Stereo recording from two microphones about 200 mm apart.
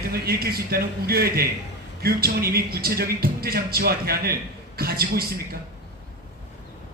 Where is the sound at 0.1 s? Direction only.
50° right (ahead or behind).